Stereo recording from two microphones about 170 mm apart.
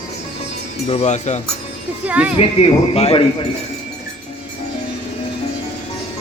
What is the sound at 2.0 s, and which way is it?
Speech, 10° right (ahead or behind).